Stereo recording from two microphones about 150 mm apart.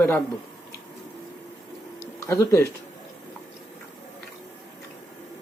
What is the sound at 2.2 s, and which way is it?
Speech, 20° left (ahead or behind).